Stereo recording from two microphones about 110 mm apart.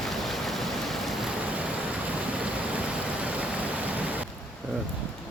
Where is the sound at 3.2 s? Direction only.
10° right (ahead or behind).